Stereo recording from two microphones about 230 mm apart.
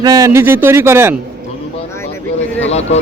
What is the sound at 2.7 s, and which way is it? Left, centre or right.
Speech, left.